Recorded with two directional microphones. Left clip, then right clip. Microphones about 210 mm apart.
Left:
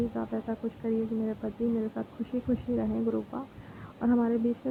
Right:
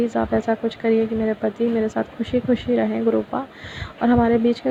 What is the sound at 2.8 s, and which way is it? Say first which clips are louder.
A woman's voice: right 11 dB; 40° right (ahead or behind).